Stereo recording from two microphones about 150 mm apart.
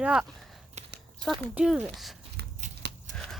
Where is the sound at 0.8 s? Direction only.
50° right (ahead or behind).